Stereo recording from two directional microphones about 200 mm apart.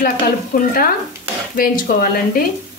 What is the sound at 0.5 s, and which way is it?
A woman's voice, 45° left (ahead or behind).